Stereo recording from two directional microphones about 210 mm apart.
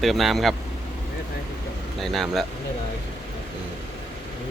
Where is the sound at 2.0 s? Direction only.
Centre (ahead or behind).